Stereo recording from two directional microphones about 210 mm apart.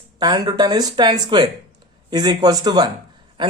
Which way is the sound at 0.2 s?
20° right (ahead or behind).